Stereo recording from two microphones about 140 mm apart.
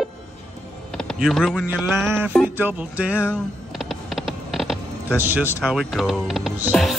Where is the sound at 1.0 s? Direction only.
Centre (ahead or behind).